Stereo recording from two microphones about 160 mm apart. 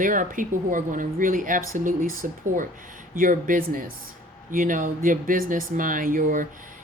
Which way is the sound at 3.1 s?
55° right (ahead or behind).